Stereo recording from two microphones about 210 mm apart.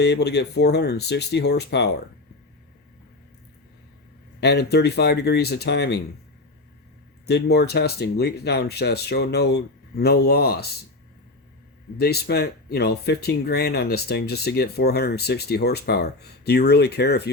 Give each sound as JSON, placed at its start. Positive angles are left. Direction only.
{"t": 0.0, "sound": "speech", "side_deg": 55}
{"t": 4.4, "sound": "speech", "side_deg": 50}
{"t": 7.3, "sound": "speech", "side_deg": 50}
{"t": 11.9, "sound": "speech", "side_deg": 50}